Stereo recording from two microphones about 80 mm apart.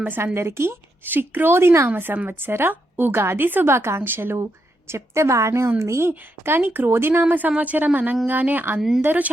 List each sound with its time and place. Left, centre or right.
0.3 s a woman's voice: right
1.9 s a woman's voice: right